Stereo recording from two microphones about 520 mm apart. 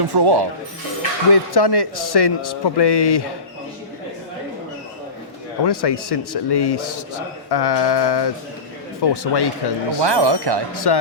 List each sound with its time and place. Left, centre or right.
0.0 s speech: right
1.3 s a man's voice: left
5.6 s a man's voice: left
10.0 s speech: right
10.8 s a man's voice: left